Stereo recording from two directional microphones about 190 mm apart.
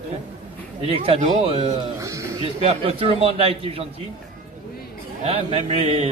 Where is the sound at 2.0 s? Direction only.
15° right (ahead or behind).